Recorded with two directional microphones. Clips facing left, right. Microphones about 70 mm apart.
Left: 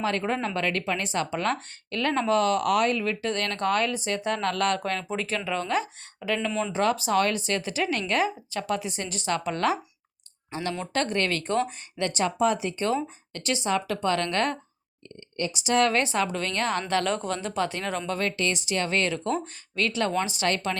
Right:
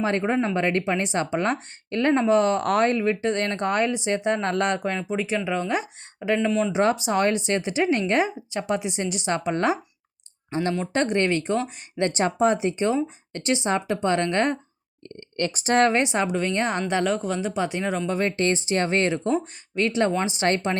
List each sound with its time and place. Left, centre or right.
0.0 s a woman's voice: right
6.5 s speech: centre
6.7 s a woman's voice: right
15.4 s speech: right
15.6 s speech: right
15.9 s a woman's voice: right
16.9 s speech: centre
18.2 s a woman's voice: right